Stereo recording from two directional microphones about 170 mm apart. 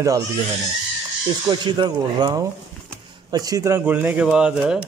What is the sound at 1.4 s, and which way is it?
A man's voice, 25° right (ahead or behind).